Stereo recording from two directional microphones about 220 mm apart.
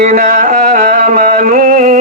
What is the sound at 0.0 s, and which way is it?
Music, 35° right (ahead or behind).